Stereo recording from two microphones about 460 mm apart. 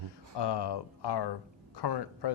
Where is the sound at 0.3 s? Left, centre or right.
Left.